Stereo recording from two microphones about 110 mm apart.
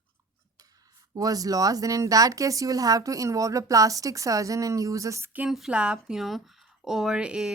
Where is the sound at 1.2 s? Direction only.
35° right (ahead or behind).